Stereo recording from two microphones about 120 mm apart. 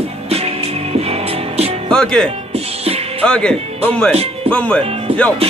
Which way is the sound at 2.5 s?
55° right (ahead or behind).